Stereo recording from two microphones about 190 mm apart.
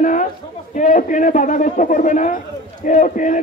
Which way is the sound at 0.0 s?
40° left (ahead or behind).